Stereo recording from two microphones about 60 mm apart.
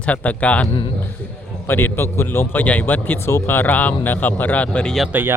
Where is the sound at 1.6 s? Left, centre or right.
Left.